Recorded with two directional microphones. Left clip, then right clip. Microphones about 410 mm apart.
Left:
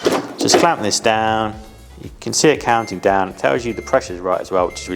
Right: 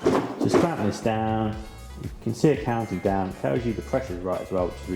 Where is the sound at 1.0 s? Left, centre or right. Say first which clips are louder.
Left 10 dB; centre.